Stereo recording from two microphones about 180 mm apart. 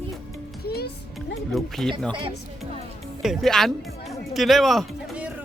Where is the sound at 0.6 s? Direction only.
60° left (ahead or behind).